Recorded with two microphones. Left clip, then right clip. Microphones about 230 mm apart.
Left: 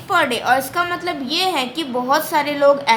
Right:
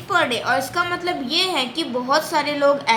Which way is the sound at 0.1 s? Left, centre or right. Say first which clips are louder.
Left 3 dB; left.